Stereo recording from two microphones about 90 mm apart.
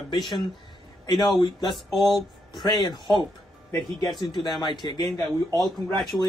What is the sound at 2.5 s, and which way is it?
Speech, 55° left (ahead or behind).